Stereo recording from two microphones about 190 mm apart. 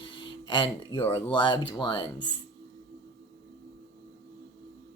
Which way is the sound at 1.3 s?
25° left (ahead or behind).